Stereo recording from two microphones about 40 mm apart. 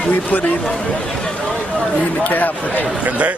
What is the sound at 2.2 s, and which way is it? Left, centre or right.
Speech, left.